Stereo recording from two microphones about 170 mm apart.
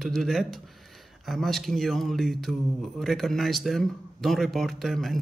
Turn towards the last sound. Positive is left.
turn(degrees=0)  # may be behind; listen again after turning